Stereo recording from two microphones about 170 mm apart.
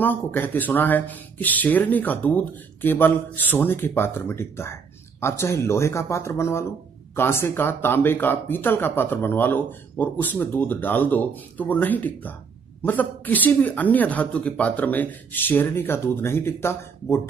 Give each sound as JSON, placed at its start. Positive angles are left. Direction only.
{"t": 0.0, "sound": "speech", "side_deg": 10}